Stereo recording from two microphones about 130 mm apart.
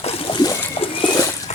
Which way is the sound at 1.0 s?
30° left (ahead or behind).